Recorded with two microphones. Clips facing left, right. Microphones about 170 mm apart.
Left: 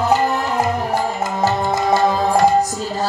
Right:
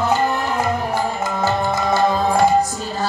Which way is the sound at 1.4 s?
40° left (ahead or behind).